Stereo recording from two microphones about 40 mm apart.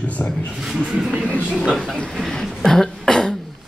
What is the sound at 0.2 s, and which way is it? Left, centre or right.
Speech, left.